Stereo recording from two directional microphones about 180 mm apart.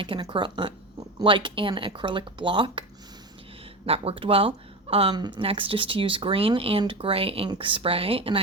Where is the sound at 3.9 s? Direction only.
30° right (ahead or behind).